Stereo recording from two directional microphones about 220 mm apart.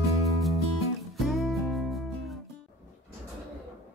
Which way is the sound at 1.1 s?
Centre (ahead or behind).